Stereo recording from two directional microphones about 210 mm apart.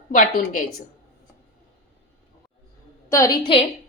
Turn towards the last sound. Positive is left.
turn(degrees=20)  # may be behind; listen again after turning